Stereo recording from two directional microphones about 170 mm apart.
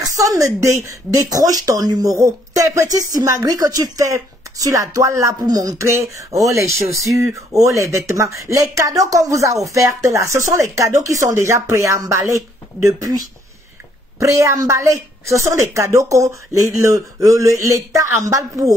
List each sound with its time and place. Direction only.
0.0 s speech: 20° right (ahead or behind)
14.2 s speech: 15° right (ahead or behind)